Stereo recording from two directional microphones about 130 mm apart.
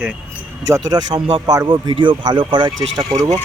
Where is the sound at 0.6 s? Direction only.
30° right (ahead or behind).